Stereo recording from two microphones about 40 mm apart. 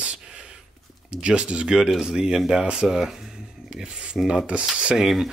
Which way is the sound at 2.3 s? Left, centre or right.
Centre.